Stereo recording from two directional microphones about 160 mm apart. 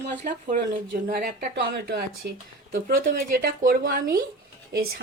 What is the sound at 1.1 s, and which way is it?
Speech, 75° right (ahead or behind).